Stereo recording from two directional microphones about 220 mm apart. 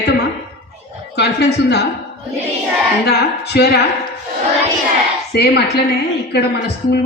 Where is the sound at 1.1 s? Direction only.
50° left (ahead or behind).